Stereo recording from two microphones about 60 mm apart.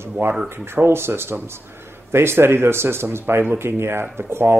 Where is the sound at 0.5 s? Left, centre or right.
Right.